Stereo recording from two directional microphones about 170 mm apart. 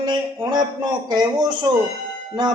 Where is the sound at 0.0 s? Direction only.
25° right (ahead or behind).